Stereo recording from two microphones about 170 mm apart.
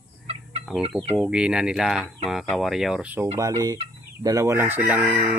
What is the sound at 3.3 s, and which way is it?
Chicken, 20° right (ahead or behind).